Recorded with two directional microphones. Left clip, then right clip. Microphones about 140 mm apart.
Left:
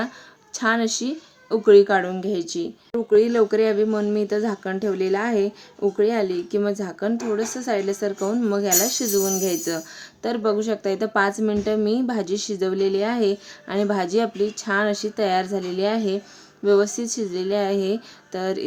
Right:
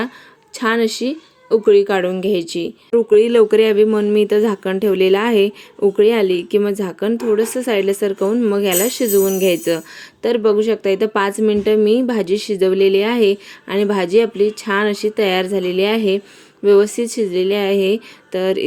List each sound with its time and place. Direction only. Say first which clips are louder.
0.6 s a woman's voice: right 5 dB; 5° right (ahead or behind)
10.2 s a woman's voice: right 8 dB; 10° right (ahead or behind)